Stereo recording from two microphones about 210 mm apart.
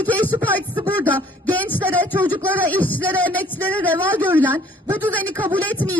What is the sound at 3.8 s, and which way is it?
A man's voice, 10° right (ahead or behind).